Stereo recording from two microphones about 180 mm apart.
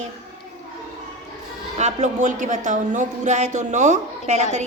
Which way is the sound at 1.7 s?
40° right (ahead or behind).